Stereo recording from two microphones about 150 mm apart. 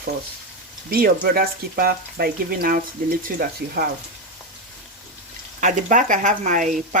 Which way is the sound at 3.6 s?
90° right.